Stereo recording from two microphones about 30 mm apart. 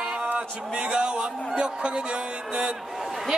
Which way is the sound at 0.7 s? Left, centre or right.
Right.